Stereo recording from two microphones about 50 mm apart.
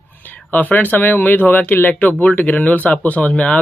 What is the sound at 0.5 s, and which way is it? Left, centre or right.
Speech, left.